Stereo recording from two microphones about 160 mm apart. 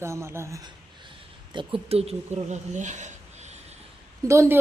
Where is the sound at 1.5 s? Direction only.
30° right (ahead or behind); by 3.1 s 50° right (ahead or behind).